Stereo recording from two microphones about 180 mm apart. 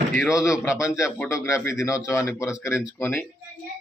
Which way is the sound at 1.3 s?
15° left (ahead or behind).